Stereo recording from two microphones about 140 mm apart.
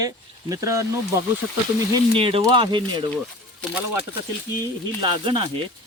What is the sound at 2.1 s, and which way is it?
Speech, 40° right (ahead or behind).